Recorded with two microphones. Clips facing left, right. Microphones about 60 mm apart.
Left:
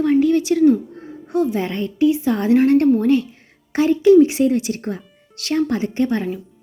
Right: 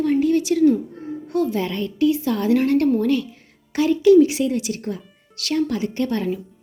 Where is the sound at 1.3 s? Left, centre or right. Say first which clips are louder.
Left 2 dB; left.